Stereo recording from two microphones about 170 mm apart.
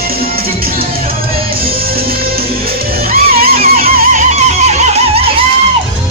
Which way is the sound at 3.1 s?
60° right (ahead or behind).